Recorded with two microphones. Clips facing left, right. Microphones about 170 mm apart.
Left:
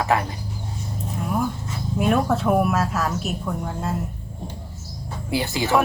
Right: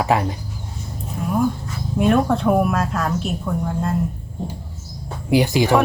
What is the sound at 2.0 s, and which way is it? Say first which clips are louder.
Speech: right 3 dB; centre (ahead or behind).